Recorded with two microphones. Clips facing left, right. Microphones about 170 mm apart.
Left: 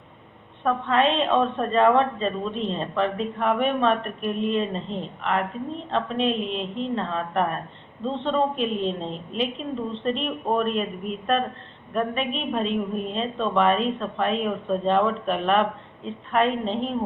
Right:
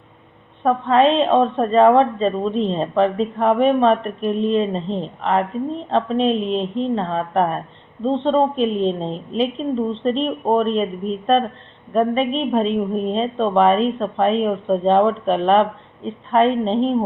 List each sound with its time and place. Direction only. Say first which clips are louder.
0.6 s a woman's voice: right 6 dB; 35° right (ahead or behind)